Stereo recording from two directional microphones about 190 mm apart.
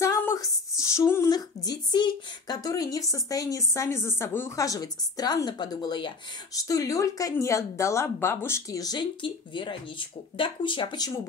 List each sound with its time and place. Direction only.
0.0 s speech: 15° left (ahead or behind)